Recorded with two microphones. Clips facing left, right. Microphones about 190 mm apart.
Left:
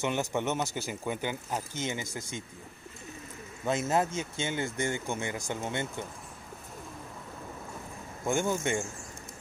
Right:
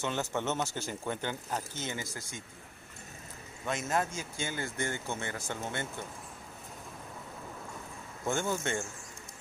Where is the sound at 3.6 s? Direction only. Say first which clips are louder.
Left 4 dB; 25° left (ahead or behind).